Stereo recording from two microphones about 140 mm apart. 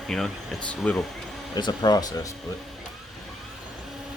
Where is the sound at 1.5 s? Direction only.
30° left (ahead or behind).